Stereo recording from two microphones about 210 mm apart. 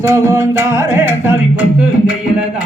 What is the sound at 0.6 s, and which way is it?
Music, 15° right (ahead or behind).